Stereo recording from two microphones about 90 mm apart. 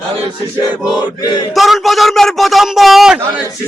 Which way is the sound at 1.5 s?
Centre (ahead or behind).